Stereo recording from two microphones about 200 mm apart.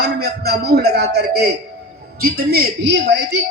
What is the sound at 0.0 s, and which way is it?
A man's voice, 50° right (ahead or behind).